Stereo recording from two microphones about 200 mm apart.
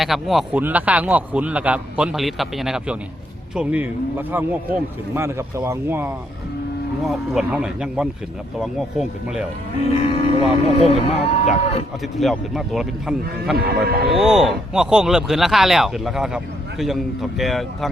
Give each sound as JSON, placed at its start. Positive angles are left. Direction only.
{"t": 0.0, "sound": "speech", "side_deg": 0}
{"t": 5.1, "sound": "speech", "side_deg": -15}
{"t": 9.9, "sound": "speech", "side_deg": 30}
{"t": 12.2, "sound": "speech", "side_deg": 0}
{"t": 13.8, "sound": "speech", "side_deg": -50}
{"t": 14.1, "sound": "speech", "side_deg": 0}